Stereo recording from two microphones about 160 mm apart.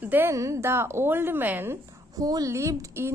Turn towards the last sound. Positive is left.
turn(degrees=-15)  # may be behind; listen again after turning